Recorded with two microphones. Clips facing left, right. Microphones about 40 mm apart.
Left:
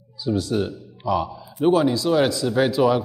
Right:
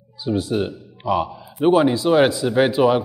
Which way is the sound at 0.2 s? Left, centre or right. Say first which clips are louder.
Right 1 dB; right.